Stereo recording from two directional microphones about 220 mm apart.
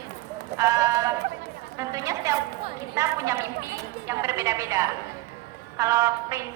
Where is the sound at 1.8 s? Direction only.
15° right (ahead or behind).